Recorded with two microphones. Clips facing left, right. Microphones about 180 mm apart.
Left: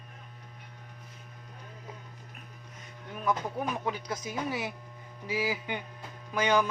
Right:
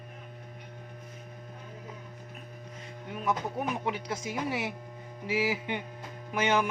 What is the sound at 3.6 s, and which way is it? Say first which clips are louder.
Speech: right 1 dB; 25° right (ahead or behind).